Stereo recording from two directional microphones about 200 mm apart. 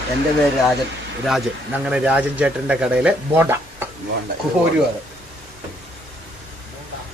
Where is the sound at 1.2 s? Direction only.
5° right (ahead or behind).